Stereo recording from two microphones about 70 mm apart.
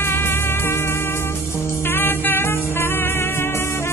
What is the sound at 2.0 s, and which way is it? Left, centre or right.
Music, left.